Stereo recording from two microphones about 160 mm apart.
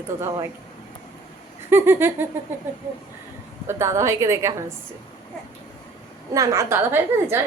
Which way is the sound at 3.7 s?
15° right (ahead or behind).